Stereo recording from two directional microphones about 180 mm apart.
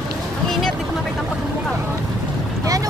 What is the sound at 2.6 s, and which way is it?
Boat, 20° right (ahead or behind).